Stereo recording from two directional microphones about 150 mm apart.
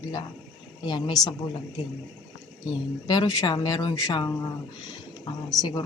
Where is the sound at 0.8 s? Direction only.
30° left (ahead or behind).